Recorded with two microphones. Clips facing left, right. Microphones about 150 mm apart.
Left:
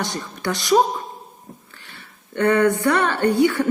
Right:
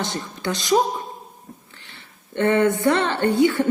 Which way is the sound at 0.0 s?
20° right (ahead or behind).